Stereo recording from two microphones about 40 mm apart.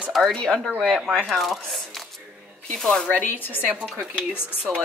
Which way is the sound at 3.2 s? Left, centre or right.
Left.